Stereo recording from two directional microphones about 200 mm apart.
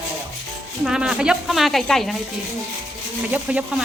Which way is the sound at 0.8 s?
5° right (ahead or behind).